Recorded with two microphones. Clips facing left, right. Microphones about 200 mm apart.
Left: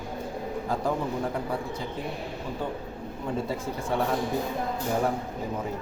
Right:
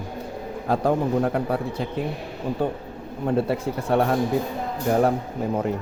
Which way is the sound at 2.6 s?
60° right (ahead or behind).